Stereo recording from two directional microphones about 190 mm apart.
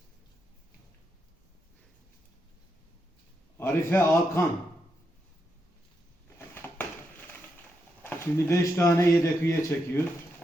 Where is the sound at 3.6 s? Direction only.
10° left (ahead or behind).